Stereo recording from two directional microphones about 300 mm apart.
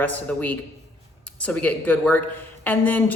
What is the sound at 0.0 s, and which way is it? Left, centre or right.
A man's voice, centre.